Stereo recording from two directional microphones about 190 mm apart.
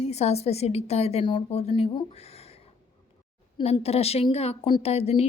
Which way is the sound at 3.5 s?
30° left (ahead or behind).